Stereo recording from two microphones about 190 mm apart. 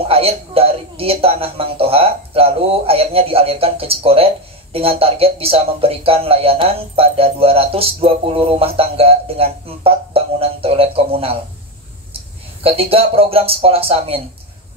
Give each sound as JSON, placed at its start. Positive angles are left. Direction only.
{"t": 0.1, "sound": "speech", "side_deg": -30}
{"t": 12.6, "sound": "speech", "side_deg": -30}